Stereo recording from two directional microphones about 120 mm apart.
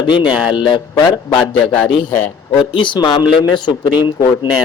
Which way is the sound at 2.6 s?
40° left (ahead or behind).